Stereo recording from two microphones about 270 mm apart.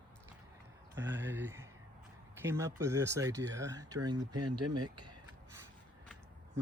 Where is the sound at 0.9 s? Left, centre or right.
Centre.